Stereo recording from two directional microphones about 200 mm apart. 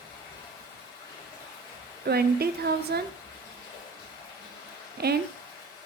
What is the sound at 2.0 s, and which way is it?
Speech, 50° right (ahead or behind).